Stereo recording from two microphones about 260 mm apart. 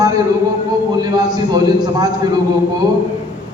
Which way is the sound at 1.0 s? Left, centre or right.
Centre.